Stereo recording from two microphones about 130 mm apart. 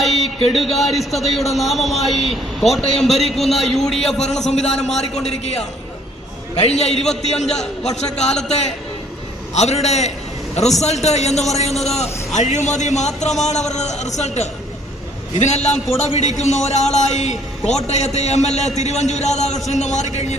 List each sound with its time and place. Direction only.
0.5 s a man's voice: centre (ahead or behind)
4.3 s a man's voice: 60° left (ahead or behind)
9.6 s a man's voice: 55° left (ahead or behind)